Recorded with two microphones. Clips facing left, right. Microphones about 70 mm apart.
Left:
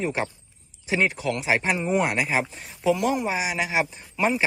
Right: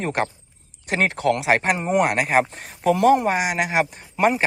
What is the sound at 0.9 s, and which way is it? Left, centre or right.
Speech, right.